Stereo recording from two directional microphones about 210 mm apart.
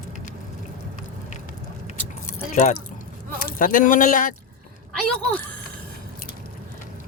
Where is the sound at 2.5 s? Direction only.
35° left (ahead or behind).